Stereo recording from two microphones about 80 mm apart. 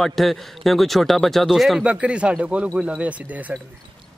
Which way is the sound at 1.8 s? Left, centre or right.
Centre.